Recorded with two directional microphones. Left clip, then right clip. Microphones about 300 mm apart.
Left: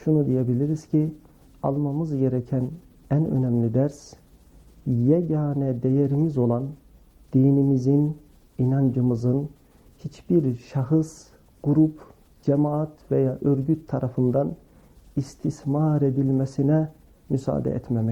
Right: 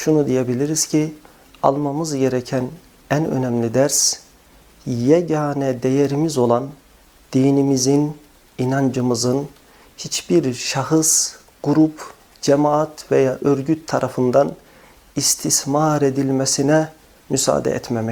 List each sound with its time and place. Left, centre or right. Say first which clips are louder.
0.0 s speech: right 6 dB; centre
1.7 s speech: right 6 dB; centre
2.0 s speech: right 6 dB; centre
7.3 s speech: right 5 dB; centre
11.6 s speech: right 5 dB; centre
15.7 s speech: right 6 dB; centre